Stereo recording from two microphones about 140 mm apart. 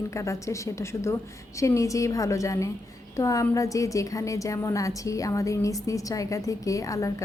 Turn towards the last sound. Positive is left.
turn(degrees=25)  # may be behind; listen again after turning